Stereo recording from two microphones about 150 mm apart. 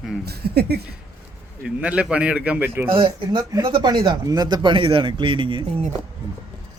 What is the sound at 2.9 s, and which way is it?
Speech, 35° right (ahead or behind).